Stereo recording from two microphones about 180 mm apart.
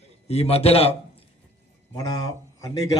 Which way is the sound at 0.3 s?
35° left (ahead or behind).